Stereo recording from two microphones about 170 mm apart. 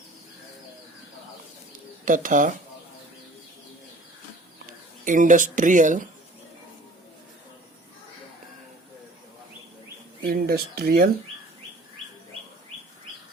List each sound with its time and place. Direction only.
2.0 s speech: 50° right (ahead or behind)
5.0 s speech: 50° right (ahead or behind)
10.2 s speech: 60° right (ahead or behind)